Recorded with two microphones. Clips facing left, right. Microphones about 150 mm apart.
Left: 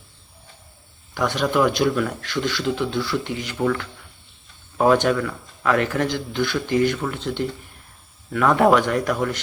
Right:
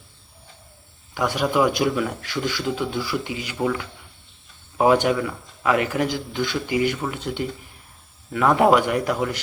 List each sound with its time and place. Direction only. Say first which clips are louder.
1.1 s a man's voice: even; 10° right (ahead or behind)